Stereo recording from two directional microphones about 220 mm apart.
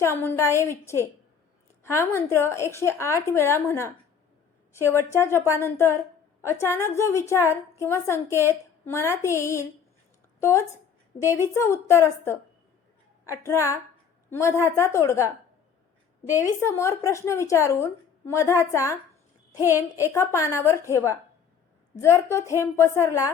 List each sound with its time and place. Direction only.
0.0 s a woman's voice: 10° left (ahead or behind)
11.2 s a woman's voice: 10° right (ahead or behind)
11.5 s a woman's voice: 10° left (ahead or behind)
16.3 s a woman's voice: 10° left (ahead or behind)
20.0 s a woman's voice: 10° left (ahead or behind)